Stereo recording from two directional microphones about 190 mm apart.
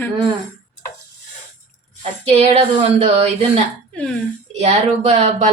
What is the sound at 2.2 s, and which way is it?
Speech, 35° right (ahead or behind).